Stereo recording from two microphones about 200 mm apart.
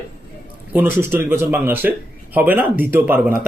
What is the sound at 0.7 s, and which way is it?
Speech, 10° right (ahead or behind).